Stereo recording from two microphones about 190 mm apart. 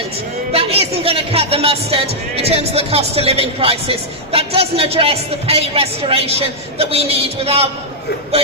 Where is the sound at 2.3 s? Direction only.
30° right (ahead or behind).